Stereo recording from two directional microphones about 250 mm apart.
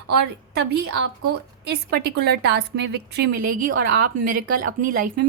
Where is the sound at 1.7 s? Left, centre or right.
Right.